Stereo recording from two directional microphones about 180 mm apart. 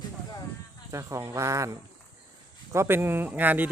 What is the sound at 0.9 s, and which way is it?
Speech, 15° right (ahead or behind).